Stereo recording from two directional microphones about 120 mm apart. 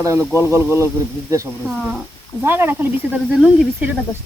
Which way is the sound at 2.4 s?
20° right (ahead or behind).